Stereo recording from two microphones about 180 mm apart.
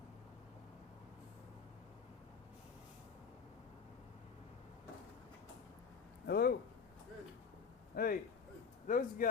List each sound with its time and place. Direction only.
6.2 s speech: 65° left (ahead or behind)
7.9 s speech: 55° left (ahead or behind)